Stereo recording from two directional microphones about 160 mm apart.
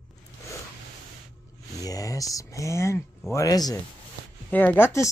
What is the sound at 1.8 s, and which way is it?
Speech, 20° left (ahead or behind).